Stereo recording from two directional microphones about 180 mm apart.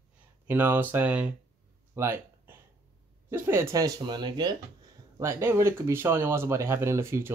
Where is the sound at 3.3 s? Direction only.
15° right (ahead or behind).